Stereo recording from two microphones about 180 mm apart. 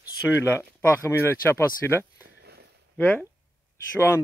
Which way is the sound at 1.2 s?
15° left (ahead or behind).